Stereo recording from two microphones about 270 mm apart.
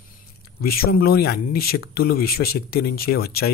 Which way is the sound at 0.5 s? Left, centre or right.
Left.